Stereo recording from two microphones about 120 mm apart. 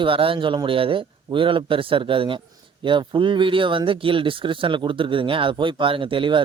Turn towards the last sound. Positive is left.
turn(degrees=-45)  # may be behind; listen again after turning